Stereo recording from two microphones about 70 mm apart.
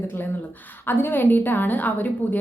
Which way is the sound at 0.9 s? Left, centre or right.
Left.